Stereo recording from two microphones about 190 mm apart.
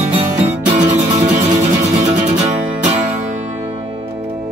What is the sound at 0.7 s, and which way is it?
Music, 40° right (ahead or behind).